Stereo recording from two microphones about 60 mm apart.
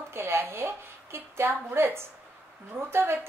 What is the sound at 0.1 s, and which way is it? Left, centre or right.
A woman's voice, right.